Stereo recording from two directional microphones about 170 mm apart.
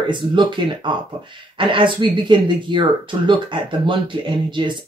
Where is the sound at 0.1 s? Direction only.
30° right (ahead or behind).